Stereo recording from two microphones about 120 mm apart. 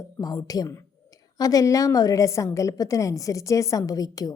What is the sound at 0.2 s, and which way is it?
A woman's voice, 30° left (ahead or behind).